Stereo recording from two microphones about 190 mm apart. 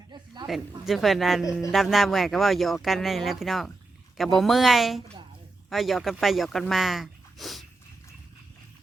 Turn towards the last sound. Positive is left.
turn(degrees=0)  # may be behind; listen again after turning